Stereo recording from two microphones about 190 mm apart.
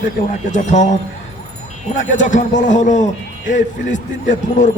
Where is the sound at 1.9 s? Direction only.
40° left (ahead or behind).